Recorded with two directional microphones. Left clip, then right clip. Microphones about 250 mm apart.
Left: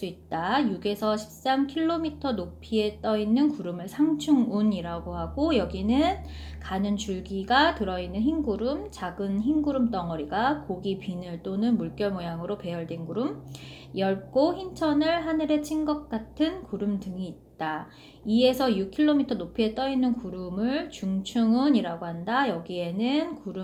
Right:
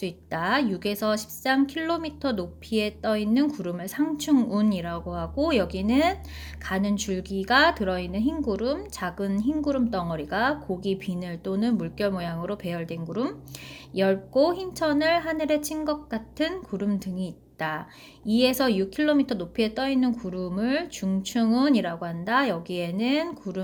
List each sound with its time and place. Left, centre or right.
0.0 s a woman's voice: right